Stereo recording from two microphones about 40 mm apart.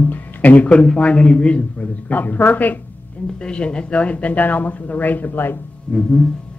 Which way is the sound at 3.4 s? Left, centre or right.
Left.